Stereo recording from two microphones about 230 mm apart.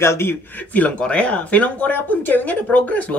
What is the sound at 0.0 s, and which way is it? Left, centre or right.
Speech, centre.